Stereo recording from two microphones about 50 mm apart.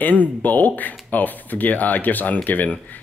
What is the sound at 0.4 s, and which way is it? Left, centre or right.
Speech, left.